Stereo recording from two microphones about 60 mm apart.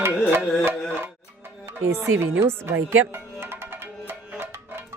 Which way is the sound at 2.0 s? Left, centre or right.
Right.